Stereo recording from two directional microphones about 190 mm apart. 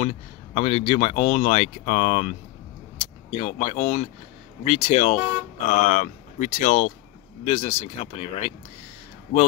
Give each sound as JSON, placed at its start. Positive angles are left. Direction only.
{"t": 0.0, "sound": "speech", "side_deg": 30}